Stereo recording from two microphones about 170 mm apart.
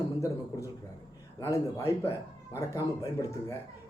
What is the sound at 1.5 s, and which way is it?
Speech, 15° left (ahead or behind).